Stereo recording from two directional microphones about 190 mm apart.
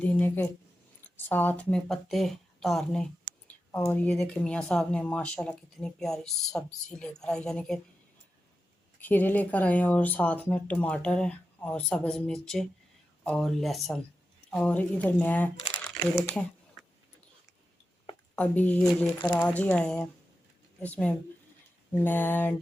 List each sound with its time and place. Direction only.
0.0 s a sound: 10° left (ahead or behind)
1.1 s speech: 10° left (ahead or behind)
9.0 s speech: 10° left (ahead or behind)
18.3 s speech: 10° left (ahead or behind)